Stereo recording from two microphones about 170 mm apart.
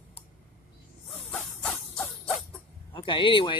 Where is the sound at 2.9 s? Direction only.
30° left (ahead or behind).